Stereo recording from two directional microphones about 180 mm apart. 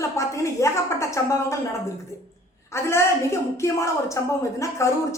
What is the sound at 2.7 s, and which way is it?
A woman's voice, 15° left (ahead or behind).